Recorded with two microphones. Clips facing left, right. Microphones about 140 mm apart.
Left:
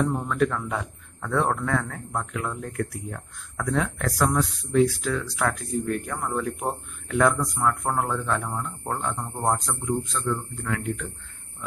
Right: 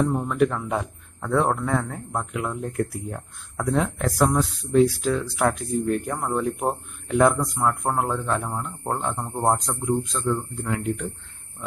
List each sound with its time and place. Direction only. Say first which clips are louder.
0.3 s speech: right 2 dB; 20° right (ahead or behind)
8.9 s speech: right 2 dB; 25° right (ahead or behind)